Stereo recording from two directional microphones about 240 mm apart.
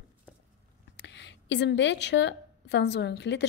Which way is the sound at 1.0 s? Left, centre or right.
Left.